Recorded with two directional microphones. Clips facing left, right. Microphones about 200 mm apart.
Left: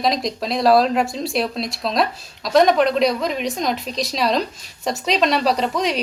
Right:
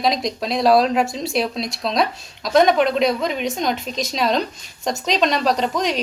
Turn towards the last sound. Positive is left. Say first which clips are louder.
# even
turn(degrees=0)  # may be behind; listen again after turning